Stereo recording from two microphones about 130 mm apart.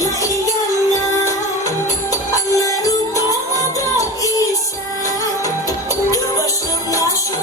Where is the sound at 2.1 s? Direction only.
25° left (ahead or behind).